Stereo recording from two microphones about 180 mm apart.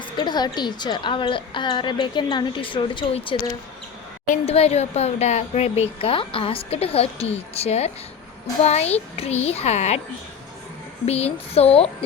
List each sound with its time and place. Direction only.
0.2 s a woman's voice: 25° left (ahead or behind)
11.0 s a woman's voice: 35° left (ahead or behind)